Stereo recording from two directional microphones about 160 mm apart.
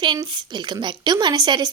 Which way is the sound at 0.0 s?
30° right (ahead or behind).